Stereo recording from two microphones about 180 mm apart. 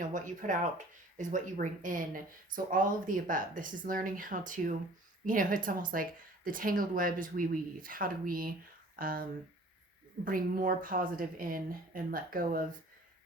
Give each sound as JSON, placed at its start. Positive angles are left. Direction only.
{"t": 0.0, "sound": "speech", "side_deg": -45}
{"t": 10.2, "sound": "speech", "side_deg": -50}